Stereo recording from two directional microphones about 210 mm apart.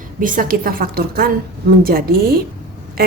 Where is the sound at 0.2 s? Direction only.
40° right (ahead or behind).